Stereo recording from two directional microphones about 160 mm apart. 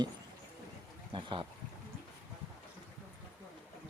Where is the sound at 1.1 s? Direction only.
30° right (ahead or behind).